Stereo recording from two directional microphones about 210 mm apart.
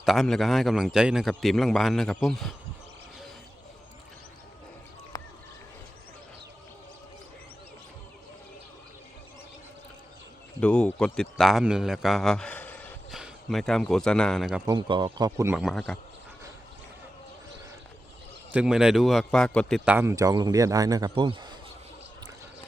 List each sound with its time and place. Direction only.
0.0 s a man's voice: centre (ahead or behind)
10.6 s a man's voice: 5° left (ahead or behind)
14.7 s speech: 20° right (ahead or behind)
15.5 s a man's voice: centre (ahead or behind)
18.5 s speech: 5° right (ahead or behind); by 21.6 s 20° right (ahead or behind)